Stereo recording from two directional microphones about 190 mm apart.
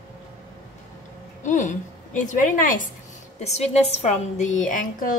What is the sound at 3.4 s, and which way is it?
A woman's voice, 35° left (ahead or behind).